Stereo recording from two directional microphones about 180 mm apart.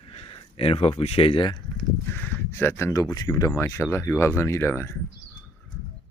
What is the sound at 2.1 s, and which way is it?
Speech, 10° left (ahead or behind).